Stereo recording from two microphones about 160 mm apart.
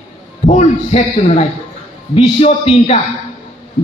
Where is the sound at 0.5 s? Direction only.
50° left (ahead or behind).